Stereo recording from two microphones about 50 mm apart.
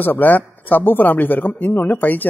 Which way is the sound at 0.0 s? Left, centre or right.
Left.